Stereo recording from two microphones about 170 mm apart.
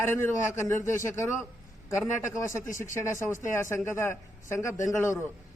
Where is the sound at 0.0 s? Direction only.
15° left (ahead or behind).